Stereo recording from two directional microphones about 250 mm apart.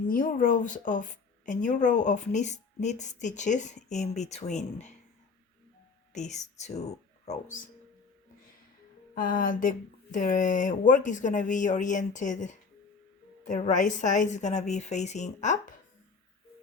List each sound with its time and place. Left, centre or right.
0.1 s a woman's voice: left
6.1 s speech: left
9.1 s a woman's voice: left